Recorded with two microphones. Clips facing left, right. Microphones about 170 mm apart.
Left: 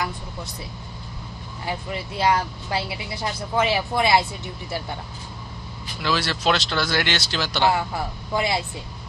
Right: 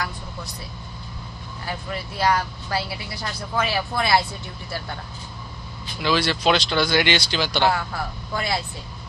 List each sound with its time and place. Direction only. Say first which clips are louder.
1.7 s speech: left 2 dB; 20° left (ahead or behind)
5.9 s speech: right 3 dB; 5° left (ahead or behind)
7.7 s speech: left 2 dB; 20° left (ahead or behind)